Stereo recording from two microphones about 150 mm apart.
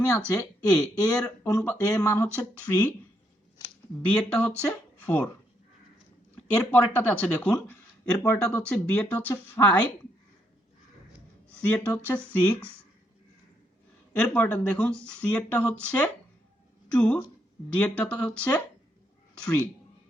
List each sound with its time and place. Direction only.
0.3 s speech: 10° left (ahead or behind)
4.0 s speech: 5° left (ahead or behind)
6.3 s speech: 10° left (ahead or behind)
11.5 s speech: 10° left (ahead or behind)
14.1 s speech: 10° left (ahead or behind)